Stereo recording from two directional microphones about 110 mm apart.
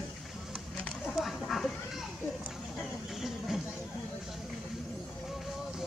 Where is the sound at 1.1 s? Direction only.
Centre (ahead or behind).